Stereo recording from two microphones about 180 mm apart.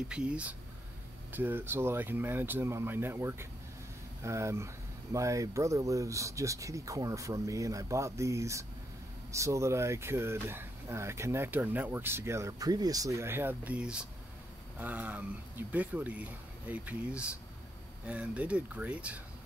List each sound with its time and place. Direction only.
0.1 s speech: 5° right (ahead or behind)